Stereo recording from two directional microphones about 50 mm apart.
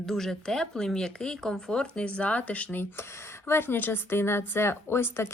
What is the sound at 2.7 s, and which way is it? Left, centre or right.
A woman's voice, left.